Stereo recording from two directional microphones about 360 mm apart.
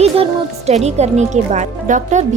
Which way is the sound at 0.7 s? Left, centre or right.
Centre.